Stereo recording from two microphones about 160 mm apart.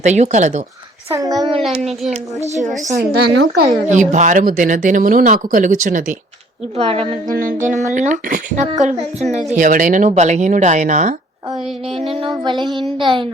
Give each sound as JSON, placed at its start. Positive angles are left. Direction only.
{"t": 0.0, "sound": "speech", "side_deg": -45}
{"t": 1.1, "sound": "music", "side_deg": -25}
{"t": 2.6, "sound": "speech", "side_deg": -70}
{"t": 3.8, "sound": "speech", "side_deg": -50}
{"t": 6.7, "sound": "a woman's voice", "side_deg": -40}
{"t": 7.3, "sound": "speech", "side_deg": -55}
{"t": 12.1, "sound": "music", "side_deg": -30}
{"t": 13.0, "sound": "a woman's voice", "side_deg": -30}